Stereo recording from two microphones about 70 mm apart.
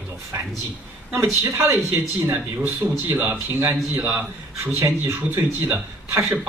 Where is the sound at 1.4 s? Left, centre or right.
Right.